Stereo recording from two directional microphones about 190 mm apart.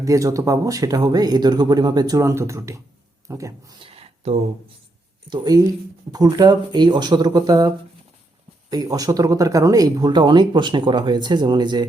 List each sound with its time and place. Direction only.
0.0 s speech: 15° right (ahead or behind)
3.2 s a sound: 15° right (ahead or behind); by 4.4 s 30° right (ahead or behind)
5.3 s speech: 20° right (ahead or behind)
8.7 s speech: 20° right (ahead or behind)